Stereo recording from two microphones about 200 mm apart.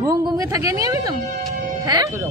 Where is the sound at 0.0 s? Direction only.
15° right (ahead or behind).